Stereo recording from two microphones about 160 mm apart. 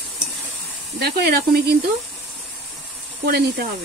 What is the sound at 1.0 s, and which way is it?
Speech, 85° right.